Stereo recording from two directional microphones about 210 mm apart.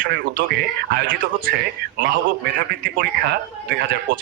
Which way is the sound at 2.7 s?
45° right (ahead or behind).